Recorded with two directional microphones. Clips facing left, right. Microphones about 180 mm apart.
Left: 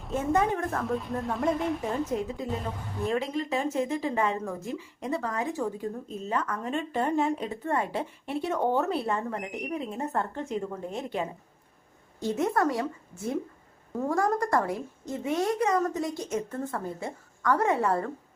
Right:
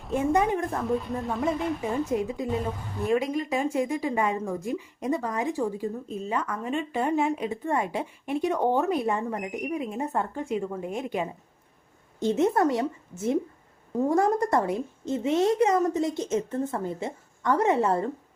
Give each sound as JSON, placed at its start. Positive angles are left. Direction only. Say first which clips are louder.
{"t": 0.0, "sound": "a woman's voice", "louder": "right 2 dB", "side_deg": 0}